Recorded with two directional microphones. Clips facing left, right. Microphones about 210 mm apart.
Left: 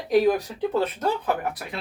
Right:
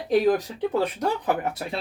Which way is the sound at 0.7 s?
15° right (ahead or behind).